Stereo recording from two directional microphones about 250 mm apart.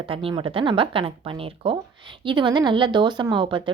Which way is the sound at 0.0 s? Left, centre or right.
Right.